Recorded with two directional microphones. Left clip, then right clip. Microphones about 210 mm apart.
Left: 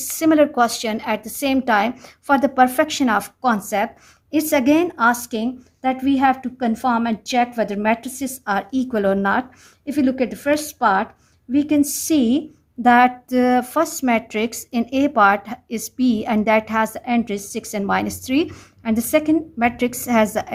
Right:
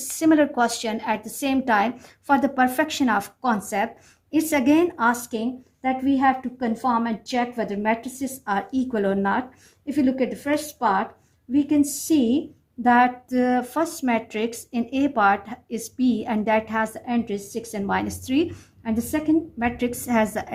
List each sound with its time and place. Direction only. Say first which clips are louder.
0.1 s speech: left 3 dB; 30° left (ahead or behind)